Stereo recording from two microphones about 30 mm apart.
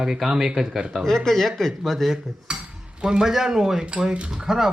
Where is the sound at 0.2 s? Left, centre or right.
Centre.